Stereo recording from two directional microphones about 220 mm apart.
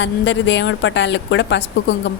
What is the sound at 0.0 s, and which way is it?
A woman's voice, 55° left (ahead or behind).